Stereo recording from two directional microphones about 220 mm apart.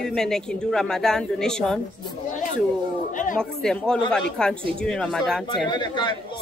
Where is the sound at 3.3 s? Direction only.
5° left (ahead or behind).